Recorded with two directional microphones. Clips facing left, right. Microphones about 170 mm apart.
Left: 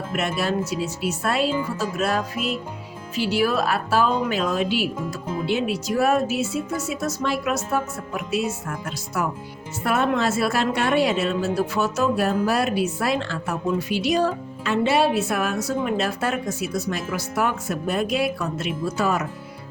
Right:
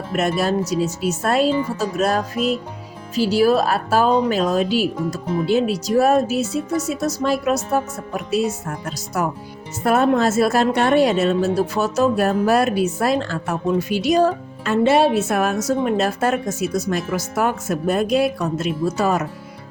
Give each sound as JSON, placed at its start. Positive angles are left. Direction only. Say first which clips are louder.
{"t": 0.1, "sound": "speech", "louder": "right 5 dB", "side_deg": -40}
{"t": 9.8, "sound": "a woman's voice", "louder": "right 5 dB", "side_deg": -40}